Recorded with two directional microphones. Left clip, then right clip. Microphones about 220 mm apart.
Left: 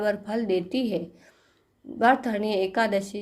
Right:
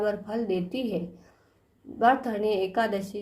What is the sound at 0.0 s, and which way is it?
A woman's voice, 30° left (ahead or behind).